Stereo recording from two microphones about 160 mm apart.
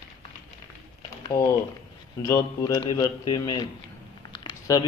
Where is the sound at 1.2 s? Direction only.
20° left (ahead or behind).